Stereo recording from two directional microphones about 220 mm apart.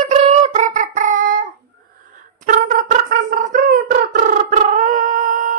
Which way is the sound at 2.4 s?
40° right (ahead or behind).